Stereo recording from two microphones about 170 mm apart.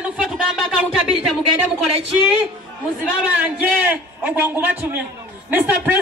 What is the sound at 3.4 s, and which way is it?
A man's voice, 10° right (ahead or behind).